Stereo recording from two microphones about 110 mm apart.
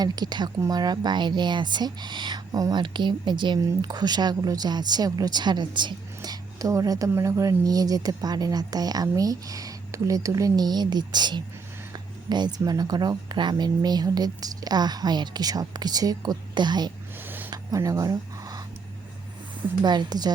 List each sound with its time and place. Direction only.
0.0 s speech: 40° right (ahead or behind)
6.6 s speech: 30° right (ahead or behind)
17.5 s a sound: 30° right (ahead or behind)
19.8 s speech: 40° right (ahead or behind)